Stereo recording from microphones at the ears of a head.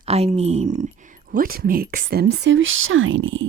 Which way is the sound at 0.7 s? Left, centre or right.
Right.